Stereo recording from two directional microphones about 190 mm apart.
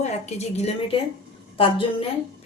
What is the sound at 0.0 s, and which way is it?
A woman's voice, 35° left (ahead or behind).